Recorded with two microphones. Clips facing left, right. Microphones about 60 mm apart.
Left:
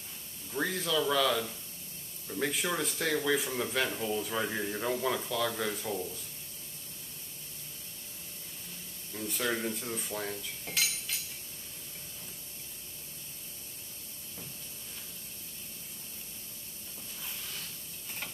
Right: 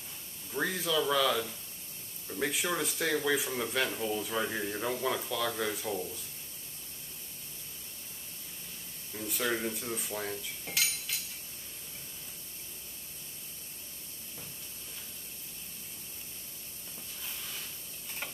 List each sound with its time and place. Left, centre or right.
0.5 s a man's voice: centre
9.1 s speech: centre
17.3 s a sound: centre